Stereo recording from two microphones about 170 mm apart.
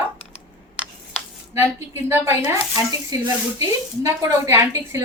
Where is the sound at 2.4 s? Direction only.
20° right (ahead or behind).